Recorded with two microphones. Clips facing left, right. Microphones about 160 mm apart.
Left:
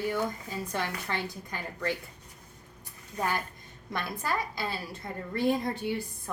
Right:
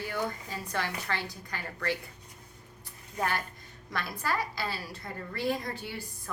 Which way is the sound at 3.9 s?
20° left (ahead or behind).